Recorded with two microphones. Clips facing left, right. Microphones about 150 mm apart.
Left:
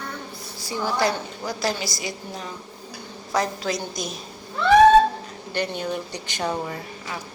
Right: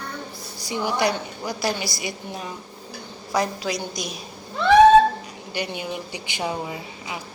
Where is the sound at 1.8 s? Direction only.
45° left (ahead or behind).